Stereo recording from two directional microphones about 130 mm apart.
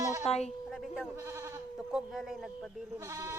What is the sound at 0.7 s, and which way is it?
Speech, centre (ahead or behind).